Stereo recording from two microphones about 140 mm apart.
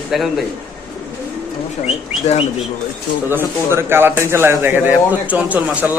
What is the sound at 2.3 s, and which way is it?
Speech, 50° left (ahead or behind).